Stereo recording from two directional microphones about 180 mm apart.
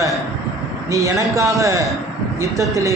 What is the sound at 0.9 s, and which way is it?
A man's voice, 20° right (ahead or behind).